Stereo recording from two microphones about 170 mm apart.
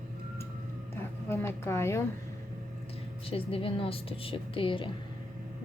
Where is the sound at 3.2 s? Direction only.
35° left (ahead or behind).